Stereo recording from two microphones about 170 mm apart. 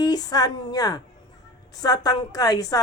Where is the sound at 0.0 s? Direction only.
25° left (ahead or behind).